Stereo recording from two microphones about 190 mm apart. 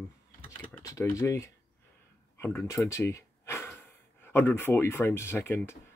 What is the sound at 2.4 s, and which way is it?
Speech, 15° left (ahead or behind).